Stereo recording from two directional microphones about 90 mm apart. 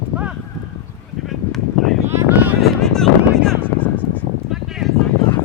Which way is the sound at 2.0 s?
20° right (ahead or behind).